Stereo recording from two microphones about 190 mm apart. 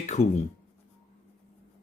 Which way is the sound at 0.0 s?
35° left (ahead or behind).